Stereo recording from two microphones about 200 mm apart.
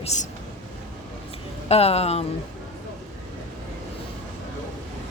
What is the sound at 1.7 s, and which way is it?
Speech, 30° left (ahead or behind).